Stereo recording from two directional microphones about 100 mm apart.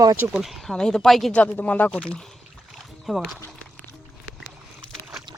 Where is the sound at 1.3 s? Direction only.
15° left (ahead or behind).